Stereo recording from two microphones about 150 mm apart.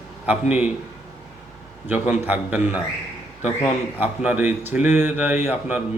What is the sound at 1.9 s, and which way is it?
Speech, 10° right (ahead or behind).